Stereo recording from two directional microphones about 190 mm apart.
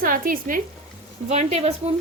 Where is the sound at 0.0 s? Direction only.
45° right (ahead or behind).